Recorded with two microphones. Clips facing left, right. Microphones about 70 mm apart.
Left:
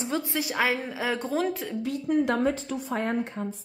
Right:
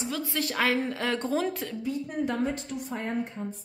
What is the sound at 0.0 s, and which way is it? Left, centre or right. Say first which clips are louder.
Speech: left 3 dB; left.